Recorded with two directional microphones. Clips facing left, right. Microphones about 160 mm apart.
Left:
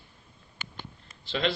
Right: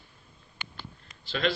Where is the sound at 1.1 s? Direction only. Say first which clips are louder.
Even; 25° left (ahead or behind).